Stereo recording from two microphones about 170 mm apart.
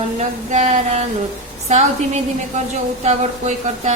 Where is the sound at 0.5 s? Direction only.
45° right (ahead or behind).